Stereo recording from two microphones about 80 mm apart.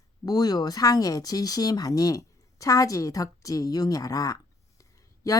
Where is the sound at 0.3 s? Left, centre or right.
Left.